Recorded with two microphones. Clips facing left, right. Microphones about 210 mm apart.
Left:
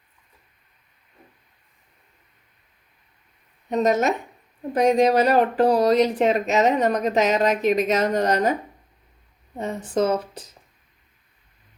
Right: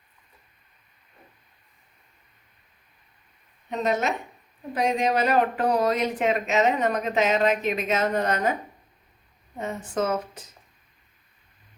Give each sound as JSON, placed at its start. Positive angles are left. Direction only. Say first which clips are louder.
{"t": 3.7, "sound": "speech", "louder": "left 5 dB", "side_deg": 40}
{"t": 9.6, "sound": "speech", "louder": "left 4 dB", "side_deg": 35}